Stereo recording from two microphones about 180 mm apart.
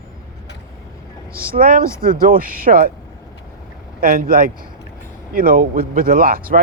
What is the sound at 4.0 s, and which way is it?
Speech, 55° right (ahead or behind).